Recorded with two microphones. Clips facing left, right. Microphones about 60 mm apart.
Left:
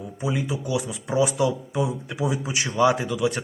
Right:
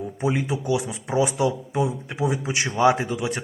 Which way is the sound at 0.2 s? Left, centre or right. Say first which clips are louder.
Right 2 dB; right.